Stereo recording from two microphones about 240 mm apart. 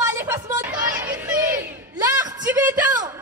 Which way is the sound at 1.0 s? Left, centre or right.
Centre.